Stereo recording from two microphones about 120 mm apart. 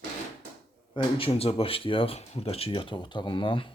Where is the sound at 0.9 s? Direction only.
50° left (ahead or behind).